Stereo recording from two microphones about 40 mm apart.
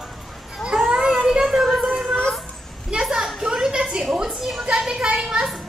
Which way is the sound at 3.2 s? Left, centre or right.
Centre.